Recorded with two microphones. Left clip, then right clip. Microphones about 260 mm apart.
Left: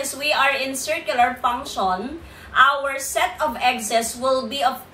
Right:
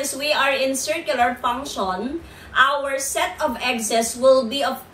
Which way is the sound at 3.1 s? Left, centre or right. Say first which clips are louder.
Left 4 dB; centre.